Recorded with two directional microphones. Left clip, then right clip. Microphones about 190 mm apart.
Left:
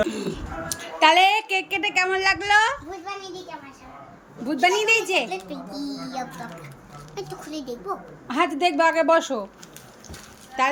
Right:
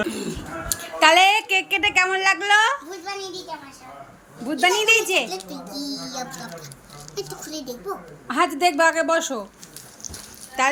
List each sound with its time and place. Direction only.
0.7 s a woman's voice: centre (ahead or behind)
4.4 s a woman's voice: 5° left (ahead or behind)
5.8 s speech: 30° left (ahead or behind)
6.1 s a woman's voice: 5° left (ahead or behind)
10.6 s a woman's voice: centre (ahead or behind)